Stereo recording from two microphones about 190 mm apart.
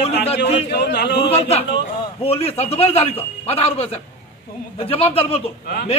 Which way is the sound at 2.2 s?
30° left (ahead or behind).